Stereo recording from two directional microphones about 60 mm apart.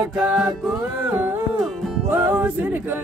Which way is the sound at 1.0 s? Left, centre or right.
Right.